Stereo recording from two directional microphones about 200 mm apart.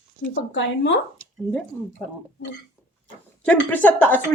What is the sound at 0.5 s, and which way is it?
Speech, 65° left (ahead or behind).